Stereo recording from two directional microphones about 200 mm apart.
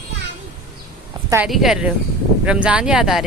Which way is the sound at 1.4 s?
Centre (ahead or behind).